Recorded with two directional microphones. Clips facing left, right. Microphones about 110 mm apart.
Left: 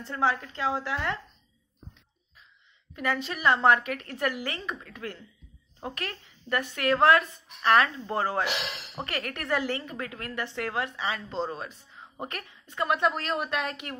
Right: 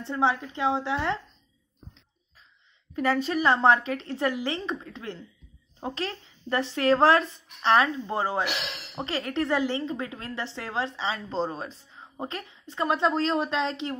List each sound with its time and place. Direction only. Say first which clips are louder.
0.0 s a woman's voice: right 2 dB; 20° right (ahead or behind)
3.0 s a woman's voice: right 5 dB; 35° right (ahead or behind)